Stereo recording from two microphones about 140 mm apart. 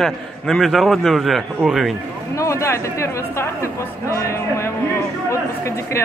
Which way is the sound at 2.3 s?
20° left (ahead or behind).